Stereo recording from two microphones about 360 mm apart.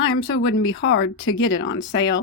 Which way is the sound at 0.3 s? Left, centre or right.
Left.